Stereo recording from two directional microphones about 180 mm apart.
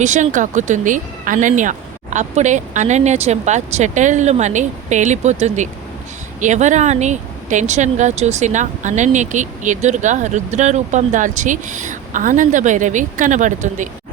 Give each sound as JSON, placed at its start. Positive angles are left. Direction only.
{"t": 0.0, "sound": "speech", "side_deg": -40}